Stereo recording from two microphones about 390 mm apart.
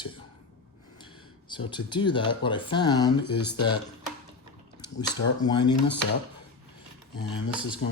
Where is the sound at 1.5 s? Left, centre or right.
Centre.